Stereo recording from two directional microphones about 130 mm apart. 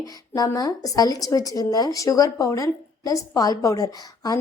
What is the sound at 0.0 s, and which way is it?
Speech, 30° left (ahead or behind).